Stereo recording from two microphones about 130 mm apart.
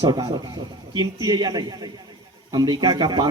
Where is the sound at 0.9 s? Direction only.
30° right (ahead or behind).